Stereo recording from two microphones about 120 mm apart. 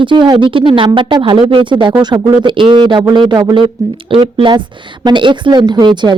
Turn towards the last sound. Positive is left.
turn(degrees=-40)  # may be behind; listen again after turning